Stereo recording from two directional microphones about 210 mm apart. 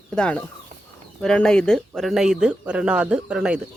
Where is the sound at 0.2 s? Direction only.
5° left (ahead or behind).